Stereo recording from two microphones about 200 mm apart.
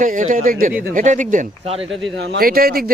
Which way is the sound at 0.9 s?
40° right (ahead or behind).